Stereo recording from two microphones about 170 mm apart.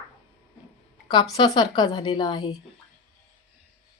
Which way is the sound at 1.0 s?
25° left (ahead or behind).